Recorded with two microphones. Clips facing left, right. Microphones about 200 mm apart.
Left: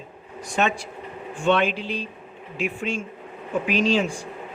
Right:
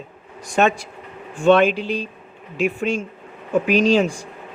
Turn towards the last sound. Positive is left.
turn(degrees=-40)  # may be behind; listen again after turning